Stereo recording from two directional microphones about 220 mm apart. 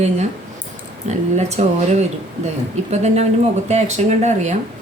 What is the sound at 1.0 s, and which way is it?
Speech, 30° right (ahead or behind).